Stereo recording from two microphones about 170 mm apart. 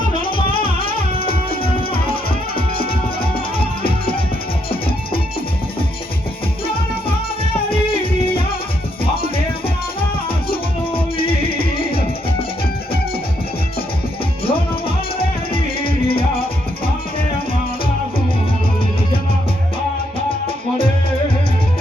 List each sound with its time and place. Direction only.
1.1 s music: 30° left (ahead or behind)
3.8 s music: 30° left (ahead or behind)
10.9 s music: 30° left (ahead or behind)
14.4 s music: 30° left (ahead or behind)